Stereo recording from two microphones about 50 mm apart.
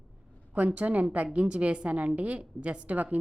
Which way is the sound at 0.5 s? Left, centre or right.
Right.